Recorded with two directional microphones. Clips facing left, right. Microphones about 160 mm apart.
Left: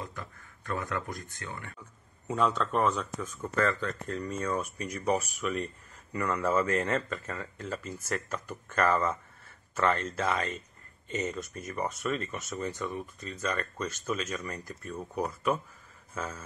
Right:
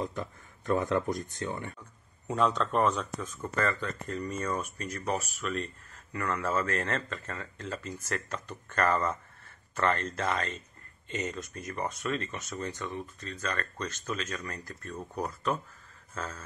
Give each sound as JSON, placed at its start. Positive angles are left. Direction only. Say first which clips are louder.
{"t": 0.0, "sound": "speech", "louder": "right 6 dB", "side_deg": -25}
{"t": 2.2, "sound": "speech", "louder": "even", "side_deg": 0}
{"t": 4.7, "sound": "speech", "louder": "left 3 dB", "side_deg": 10}